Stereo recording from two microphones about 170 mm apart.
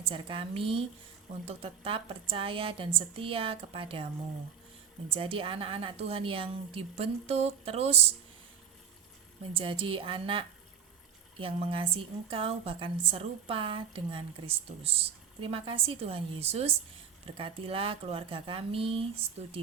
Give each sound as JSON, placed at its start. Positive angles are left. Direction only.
{"t": 0.0, "sound": "a woman's voice", "side_deg": -30}
{"t": 5.0, "sound": "a woman's voice", "side_deg": -30}
{"t": 9.6, "sound": "a woman's voice", "side_deg": -30}